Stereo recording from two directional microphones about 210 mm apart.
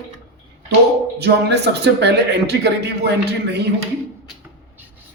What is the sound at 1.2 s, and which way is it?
A man's voice, 55° right (ahead or behind).